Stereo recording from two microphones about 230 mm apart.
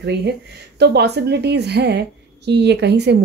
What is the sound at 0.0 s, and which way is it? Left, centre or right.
A woman's voice, right.